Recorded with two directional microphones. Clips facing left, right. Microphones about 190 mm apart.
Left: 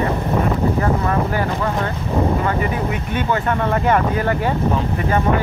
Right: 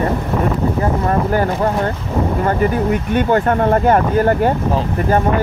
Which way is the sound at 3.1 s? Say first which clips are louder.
Right 5 dB; 45° right (ahead or behind).